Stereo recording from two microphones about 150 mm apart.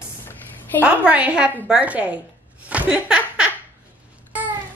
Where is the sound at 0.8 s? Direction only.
10° right (ahead or behind).